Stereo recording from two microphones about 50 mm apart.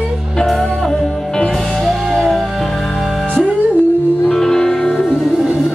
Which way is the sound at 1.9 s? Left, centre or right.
Centre.